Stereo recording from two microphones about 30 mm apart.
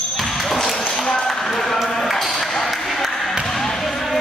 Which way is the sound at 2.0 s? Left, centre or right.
Centre.